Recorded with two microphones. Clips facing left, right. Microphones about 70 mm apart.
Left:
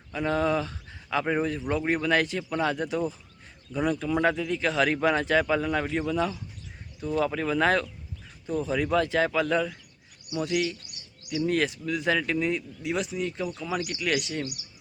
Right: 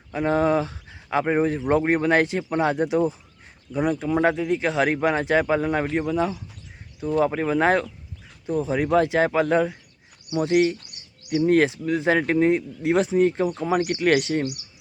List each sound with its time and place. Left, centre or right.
0.1 s speech: right
0.6 s a sound: centre
1.1 s speech: right
6.1 s speech: centre
8.8 s speech: right